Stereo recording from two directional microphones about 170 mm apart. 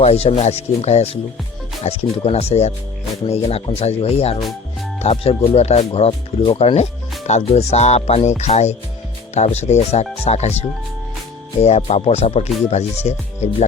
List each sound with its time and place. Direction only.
0.0 s speech: 35° left (ahead or behind)